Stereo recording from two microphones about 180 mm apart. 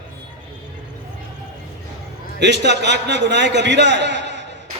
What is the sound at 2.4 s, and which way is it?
A man's voice, 75° right (ahead or behind).